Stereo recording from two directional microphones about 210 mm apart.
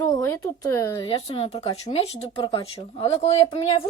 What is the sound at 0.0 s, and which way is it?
Speech, 15° left (ahead or behind).